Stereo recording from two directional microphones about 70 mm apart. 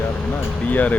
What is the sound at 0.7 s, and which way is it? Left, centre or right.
Speech, left.